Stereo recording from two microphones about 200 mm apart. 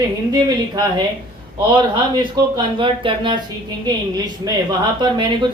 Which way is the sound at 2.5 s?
25° right (ahead or behind).